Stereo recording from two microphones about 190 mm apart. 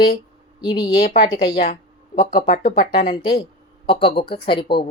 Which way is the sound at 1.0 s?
55° left (ahead or behind).